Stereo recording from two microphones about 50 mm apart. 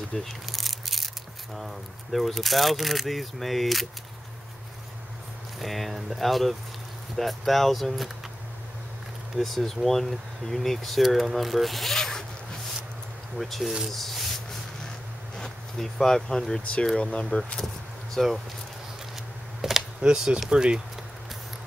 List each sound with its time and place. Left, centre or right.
0.1 s speech: centre
5.6 s speech: centre
9.4 s speech: centre
13.4 s speech: centre
13.8 s rub: centre
15.3 s speech: centre
18.1 s speech: centre
19.6 s a sound: centre
20.0 s speech: centre